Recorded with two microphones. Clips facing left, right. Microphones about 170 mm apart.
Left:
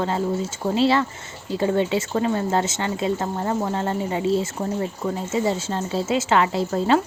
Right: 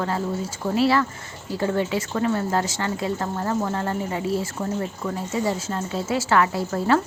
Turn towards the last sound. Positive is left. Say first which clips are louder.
# left 2 dB
turn(degrees=20)  # may be behind; listen again after turning